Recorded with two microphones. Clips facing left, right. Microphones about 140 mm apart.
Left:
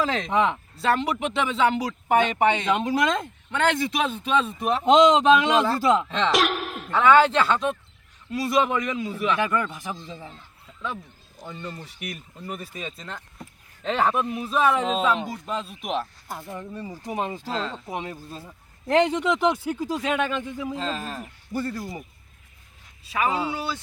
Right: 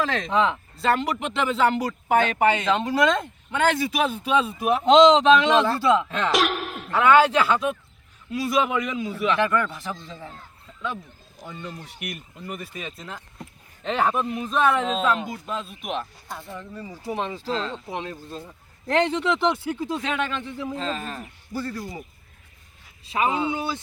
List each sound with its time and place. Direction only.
0.0 s speech: 5° left (ahead or behind)
0.3 s speech: 15° left (ahead or behind)
0.8 s speech: centre (ahead or behind)
4.9 s speech: 10° left (ahead or behind)
6.1 s speech: 5° right (ahead or behind)
9.1 s speech: 10° left (ahead or behind)
11.4 s speech: 5° right (ahead or behind)
16.5 s speech: 20° left (ahead or behind); by 21.2 s centre (ahead or behind)
21.2 s speech: 20° left (ahead or behind)
23.0 s speech: 25° right (ahead or behind)